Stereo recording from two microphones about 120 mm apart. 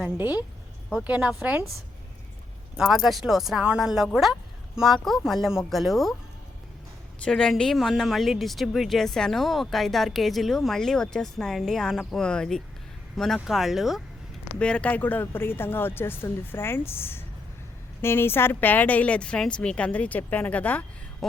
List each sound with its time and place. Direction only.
0.0 s a woman's voice: 15° right (ahead or behind)
2.7 s speech: 5° right (ahead or behind)
7.3 s speech: 5° left (ahead or behind)
14.6 s a woman's voice: 10° left (ahead or behind)